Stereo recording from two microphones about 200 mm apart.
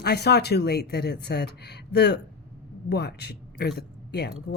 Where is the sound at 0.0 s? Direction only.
55° left (ahead or behind).